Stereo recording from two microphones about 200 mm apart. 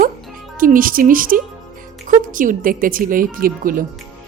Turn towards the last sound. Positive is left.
turn(degrees=-45)  # may be behind; listen again after turning